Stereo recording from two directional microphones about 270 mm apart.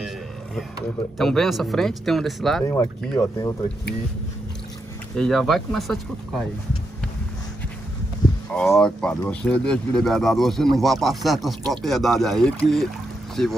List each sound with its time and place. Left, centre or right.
1.1 s speech: centre
2.6 s speech: centre
5.1 s speech: centre
8.2 s a sound: centre
8.5 s speech: centre